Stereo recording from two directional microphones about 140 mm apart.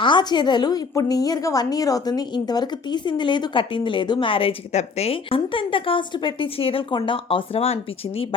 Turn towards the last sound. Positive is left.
turn(degrees=45)  # may be behind; listen again after turning